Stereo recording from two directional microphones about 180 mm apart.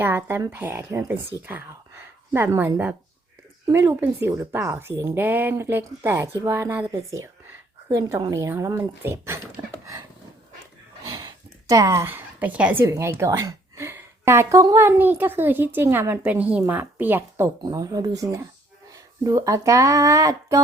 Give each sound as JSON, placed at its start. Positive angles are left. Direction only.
{"t": 0.0, "sound": "a woman's voice", "side_deg": -10}
{"t": 8.3, "sound": "a woman's voice", "side_deg": -15}
{"t": 11.2, "sound": "a woman's voice", "side_deg": -20}